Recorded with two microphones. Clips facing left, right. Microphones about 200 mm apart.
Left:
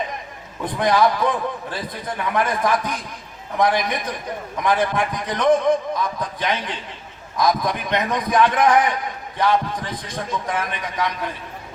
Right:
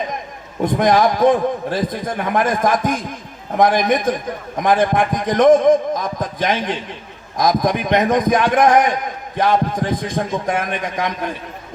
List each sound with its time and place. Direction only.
0.6 s a man's voice: 45° right (ahead or behind)